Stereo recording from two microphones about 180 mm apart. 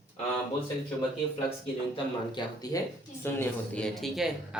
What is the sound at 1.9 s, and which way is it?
Speech, 25° left (ahead or behind).